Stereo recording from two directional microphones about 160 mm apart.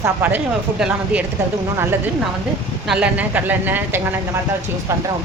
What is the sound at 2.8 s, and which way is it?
Speech, 5° right (ahead or behind).